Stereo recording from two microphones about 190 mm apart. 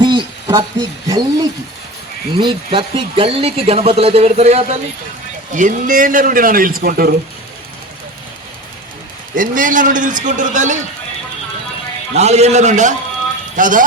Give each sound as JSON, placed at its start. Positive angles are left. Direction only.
{"t": 0.0, "sound": "speech", "side_deg": -20}
{"t": 9.3, "sound": "speech", "side_deg": -45}
{"t": 12.1, "sound": "speech", "side_deg": -35}